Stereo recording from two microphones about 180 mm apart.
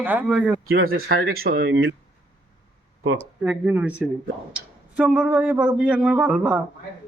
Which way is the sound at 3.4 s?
5° right (ahead or behind).